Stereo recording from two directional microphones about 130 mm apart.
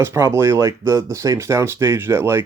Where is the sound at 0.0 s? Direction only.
20° right (ahead or behind).